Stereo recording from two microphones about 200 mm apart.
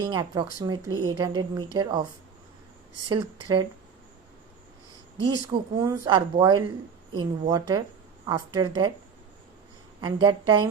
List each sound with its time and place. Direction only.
0.0 s speech: 20° right (ahead or behind)
3.1 s speech: 20° right (ahead or behind)
5.3 s speech: 20° right (ahead or behind)
10.0 s speech: 25° right (ahead or behind)